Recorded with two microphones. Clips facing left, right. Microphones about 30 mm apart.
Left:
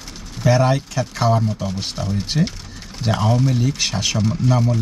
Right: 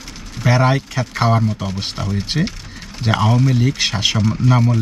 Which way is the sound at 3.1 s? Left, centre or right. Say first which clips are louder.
Right 3 dB; right.